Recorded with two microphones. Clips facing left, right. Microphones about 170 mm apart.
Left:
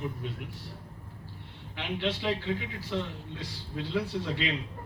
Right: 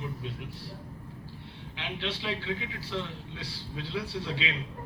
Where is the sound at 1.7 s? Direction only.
50° left (ahead or behind).